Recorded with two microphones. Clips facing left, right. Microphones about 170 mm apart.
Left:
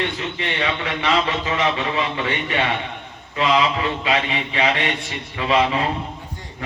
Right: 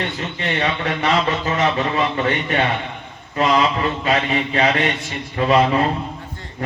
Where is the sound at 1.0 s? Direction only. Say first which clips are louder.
Right 1 dB; 45° right (ahead or behind).